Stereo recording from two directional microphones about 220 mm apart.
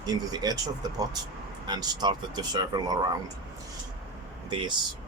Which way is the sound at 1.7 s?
20° right (ahead or behind).